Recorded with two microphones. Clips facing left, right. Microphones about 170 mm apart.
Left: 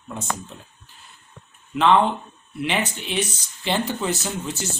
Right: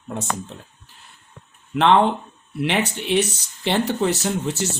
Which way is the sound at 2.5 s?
60° right (ahead or behind).